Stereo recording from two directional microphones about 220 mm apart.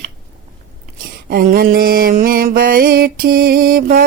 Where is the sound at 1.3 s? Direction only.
40° right (ahead or behind).